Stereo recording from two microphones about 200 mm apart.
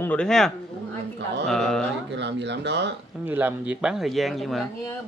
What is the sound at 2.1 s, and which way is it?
Speech, 60° right (ahead or behind).